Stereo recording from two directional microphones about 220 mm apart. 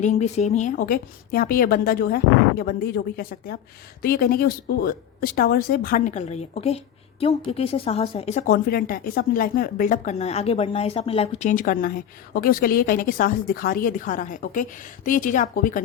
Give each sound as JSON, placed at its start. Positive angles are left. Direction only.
{"t": 0.0, "sound": "a woman's voice", "side_deg": 30}